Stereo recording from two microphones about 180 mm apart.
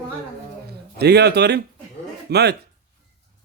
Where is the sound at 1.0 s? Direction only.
65° right (ahead or behind).